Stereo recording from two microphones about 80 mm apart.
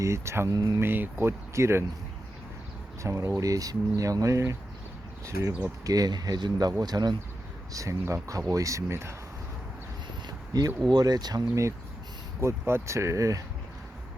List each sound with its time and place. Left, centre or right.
0.0 s speech: right
0.5 s speech: right
0.8 s speech: right
3.0 s speech: right
5.8 s speech: right
7.7 s speech: right
10.2 s a sound: right
10.8 s speech: right
12.4 s speech: right